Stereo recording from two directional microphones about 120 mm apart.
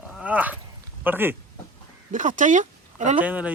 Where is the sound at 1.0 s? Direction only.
15° right (ahead or behind).